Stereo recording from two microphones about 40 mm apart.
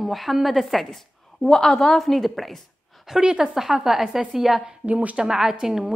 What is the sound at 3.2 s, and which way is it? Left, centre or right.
Speech, right.